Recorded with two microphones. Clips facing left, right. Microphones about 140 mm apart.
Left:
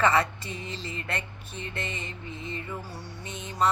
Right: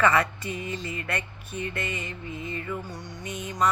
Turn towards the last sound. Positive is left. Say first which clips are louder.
# right 1 dB
turn(degrees=30)  # may be behind; listen again after turning